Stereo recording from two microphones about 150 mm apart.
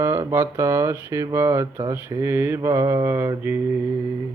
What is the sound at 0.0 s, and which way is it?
Mantra, 20° right (ahead or behind).